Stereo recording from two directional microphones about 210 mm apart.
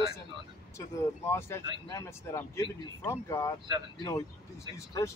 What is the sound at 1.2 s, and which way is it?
Speech, 10° left (ahead or behind).